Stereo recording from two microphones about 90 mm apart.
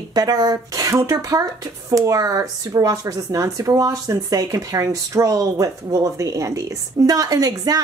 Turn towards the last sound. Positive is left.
turn(degrees=-45)  # may be behind; listen again after turning